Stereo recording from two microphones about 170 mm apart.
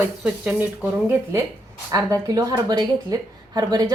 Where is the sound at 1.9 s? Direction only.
20° right (ahead or behind).